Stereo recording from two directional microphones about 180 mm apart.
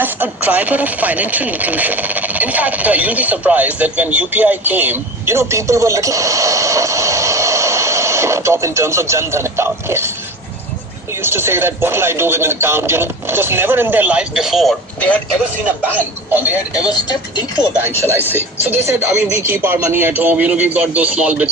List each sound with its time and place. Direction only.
0.0 s speech: 10° right (ahead or behind)
11.2 s a man's voice: 15° right (ahead or behind); by 15.2 s 5° left (ahead or behind)
16.9 s speech: 20° left (ahead or behind)
18.1 s a man's voice: 10° right (ahead or behind)